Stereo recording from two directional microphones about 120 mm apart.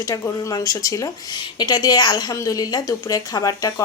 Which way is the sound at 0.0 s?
30° left (ahead or behind).